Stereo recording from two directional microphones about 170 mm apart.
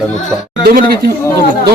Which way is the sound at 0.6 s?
60° right (ahead or behind).